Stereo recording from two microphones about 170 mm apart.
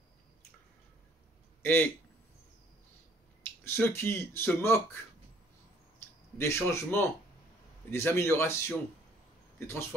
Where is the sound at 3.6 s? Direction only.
15° left (ahead or behind).